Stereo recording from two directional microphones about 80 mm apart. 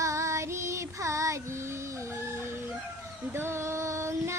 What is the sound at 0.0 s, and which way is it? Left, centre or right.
Child singing, right.